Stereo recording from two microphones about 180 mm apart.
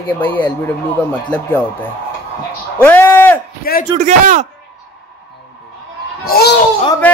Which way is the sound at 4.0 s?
40° right (ahead or behind).